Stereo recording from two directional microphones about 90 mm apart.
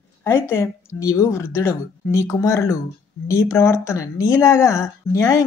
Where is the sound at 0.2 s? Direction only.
30° left (ahead or behind).